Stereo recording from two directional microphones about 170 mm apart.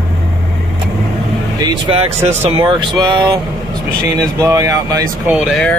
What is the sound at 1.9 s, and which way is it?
Speech, 40° right (ahead or behind).